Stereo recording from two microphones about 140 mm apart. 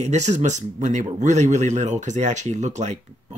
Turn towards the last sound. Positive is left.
turn(degrees=-55)  # may be behind; listen again after turning